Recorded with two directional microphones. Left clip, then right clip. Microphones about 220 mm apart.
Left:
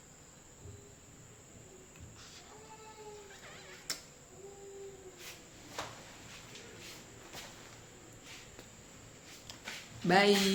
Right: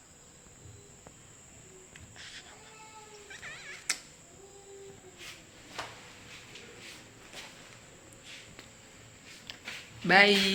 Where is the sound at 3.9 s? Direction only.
5° left (ahead or behind).